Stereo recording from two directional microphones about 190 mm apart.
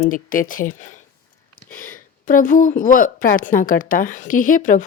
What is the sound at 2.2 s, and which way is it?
A woman's voice, 45° left (ahead or behind).